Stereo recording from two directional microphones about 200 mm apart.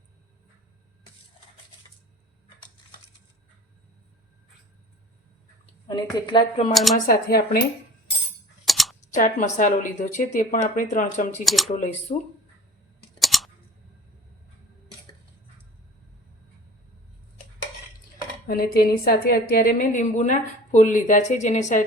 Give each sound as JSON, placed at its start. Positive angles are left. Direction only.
{"t": 5.9, "sound": "a woman's voice", "side_deg": 20}
{"t": 6.9, "sound": "speech", "side_deg": 50}
{"t": 8.6, "sound": "a sound", "side_deg": 0}
{"t": 9.1, "sound": "a woman's voice", "side_deg": 40}
{"t": 11.4, "sound": "speech", "side_deg": 0}
{"t": 11.7, "sound": "a woman's voice", "side_deg": 35}
{"t": 13.1, "sound": "a sound", "side_deg": 0}
{"t": 18.4, "sound": "a woman's voice", "side_deg": 50}